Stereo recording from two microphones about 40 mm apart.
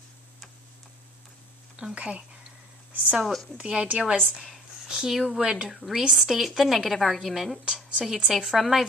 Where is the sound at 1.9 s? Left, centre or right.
Right.